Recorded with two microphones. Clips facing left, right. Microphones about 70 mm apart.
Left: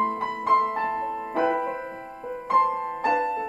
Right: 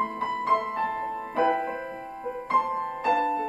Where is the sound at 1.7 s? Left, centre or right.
Left.